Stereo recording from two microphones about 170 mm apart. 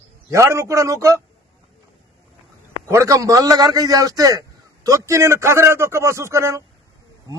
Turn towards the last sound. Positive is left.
turn(degrees=-15)  # may be behind; listen again after turning